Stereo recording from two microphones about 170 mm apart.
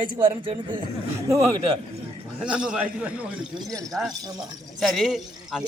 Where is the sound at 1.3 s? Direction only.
15° right (ahead or behind).